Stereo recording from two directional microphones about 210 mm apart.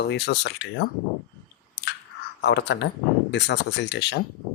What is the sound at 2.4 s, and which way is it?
Speech, 55° left (ahead or behind).